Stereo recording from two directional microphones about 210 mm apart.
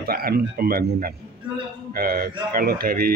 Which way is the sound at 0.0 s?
45° right (ahead or behind).